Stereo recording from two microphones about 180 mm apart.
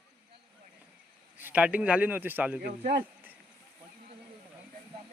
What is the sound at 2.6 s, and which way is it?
Speech, 70° right (ahead or behind).